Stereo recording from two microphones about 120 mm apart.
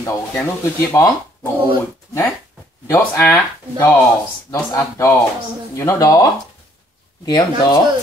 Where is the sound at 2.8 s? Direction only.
25° left (ahead or behind).